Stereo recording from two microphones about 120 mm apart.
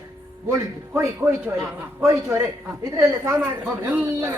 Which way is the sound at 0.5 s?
20° right (ahead or behind).